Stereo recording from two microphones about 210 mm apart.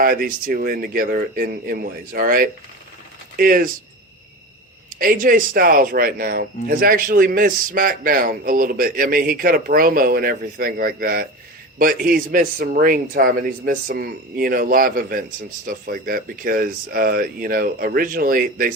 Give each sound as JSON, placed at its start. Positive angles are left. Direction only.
{"t": 0.0, "sound": "a man's voice", "side_deg": -45}
{"t": 4.9, "sound": "a man's voice", "side_deg": -40}